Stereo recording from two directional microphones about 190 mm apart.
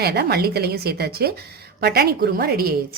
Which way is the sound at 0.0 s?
60° right (ahead or behind).